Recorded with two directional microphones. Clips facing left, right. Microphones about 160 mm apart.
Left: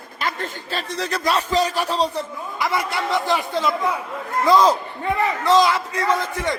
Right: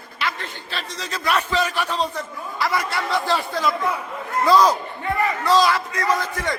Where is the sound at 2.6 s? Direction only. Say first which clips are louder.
Even; 20° left (ahead or behind).